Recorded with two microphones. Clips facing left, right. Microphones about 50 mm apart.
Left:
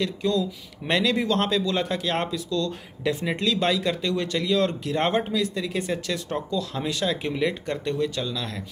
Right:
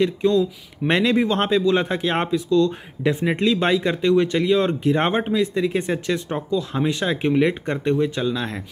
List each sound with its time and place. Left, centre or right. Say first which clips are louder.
0.0 s speech: right 6 dB; right